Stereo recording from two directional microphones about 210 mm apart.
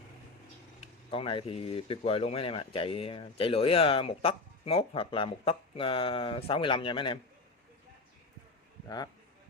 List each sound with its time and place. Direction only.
0.8 s speech: 25° left (ahead or behind)